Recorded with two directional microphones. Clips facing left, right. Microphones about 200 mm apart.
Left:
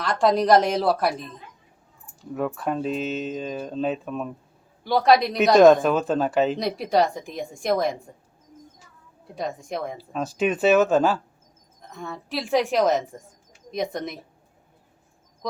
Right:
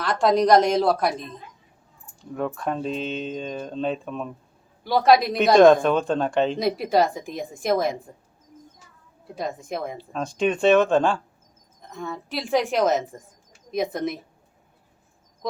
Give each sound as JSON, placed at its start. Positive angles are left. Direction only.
{"t": 0.0, "sound": "speech", "side_deg": 0}
{"t": 2.3, "sound": "speech", "side_deg": 5}
{"t": 9.2, "sound": "speech", "side_deg": 0}